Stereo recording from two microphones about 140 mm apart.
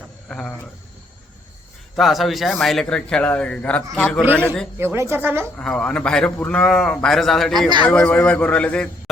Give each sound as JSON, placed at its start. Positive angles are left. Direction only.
{"t": 0.3, "sound": "speech", "side_deg": 5}
{"t": 2.0, "sound": "a man's voice", "side_deg": 0}
{"t": 4.8, "sound": "speech", "side_deg": -15}
{"t": 5.5, "sound": "a man's voice", "side_deg": 5}